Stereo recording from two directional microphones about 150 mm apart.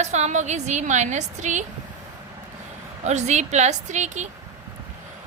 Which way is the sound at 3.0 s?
50° right (ahead or behind).